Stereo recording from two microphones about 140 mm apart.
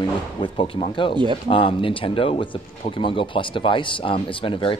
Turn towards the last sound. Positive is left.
turn(degrees=40)  # may be behind; listen again after turning